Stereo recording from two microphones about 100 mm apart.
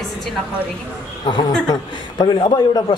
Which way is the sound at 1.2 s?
45° left (ahead or behind).